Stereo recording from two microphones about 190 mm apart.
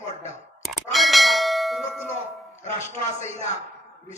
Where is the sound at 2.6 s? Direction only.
40° left (ahead or behind).